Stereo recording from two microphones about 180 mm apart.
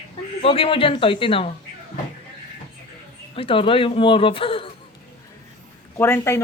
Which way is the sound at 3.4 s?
30° left (ahead or behind).